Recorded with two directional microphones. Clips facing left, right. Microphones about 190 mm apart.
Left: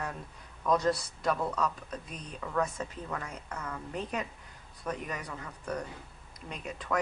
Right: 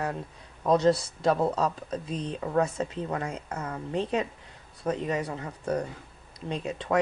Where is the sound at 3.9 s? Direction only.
25° right (ahead or behind).